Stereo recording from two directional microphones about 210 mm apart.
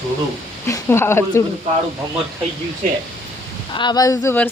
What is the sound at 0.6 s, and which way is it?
Speech, 15° left (ahead or behind).